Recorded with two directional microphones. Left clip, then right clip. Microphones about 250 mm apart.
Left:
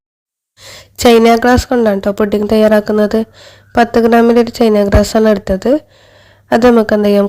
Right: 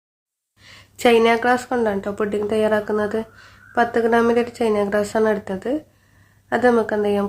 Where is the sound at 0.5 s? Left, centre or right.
Left.